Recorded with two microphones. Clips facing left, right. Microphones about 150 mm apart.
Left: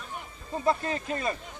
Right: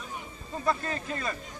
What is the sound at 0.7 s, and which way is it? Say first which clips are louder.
Speech: left 3 dB; 25° left (ahead or behind).